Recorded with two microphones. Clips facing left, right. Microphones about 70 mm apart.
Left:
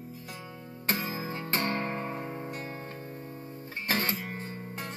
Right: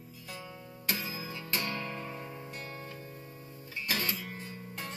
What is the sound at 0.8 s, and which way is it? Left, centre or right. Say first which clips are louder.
Music: left 5 dB; left.